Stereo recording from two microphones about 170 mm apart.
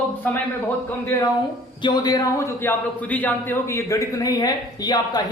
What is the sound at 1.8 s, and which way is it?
A man's voice, 25° left (ahead or behind).